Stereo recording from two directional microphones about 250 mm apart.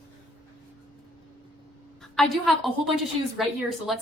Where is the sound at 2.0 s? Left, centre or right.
Centre.